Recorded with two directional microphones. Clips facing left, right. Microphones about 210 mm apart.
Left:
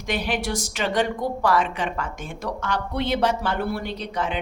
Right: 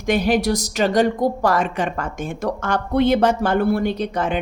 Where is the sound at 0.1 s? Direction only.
40° right (ahead or behind).